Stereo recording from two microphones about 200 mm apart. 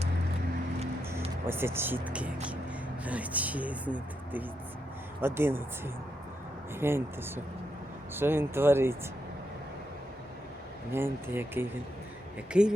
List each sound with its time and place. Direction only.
1.5 s speech: 10° right (ahead or behind)
8.1 s speech: 10° right (ahead or behind)
10.9 s speech: 10° right (ahead or behind)